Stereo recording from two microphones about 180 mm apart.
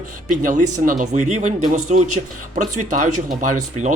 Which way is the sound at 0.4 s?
45° right (ahead or behind).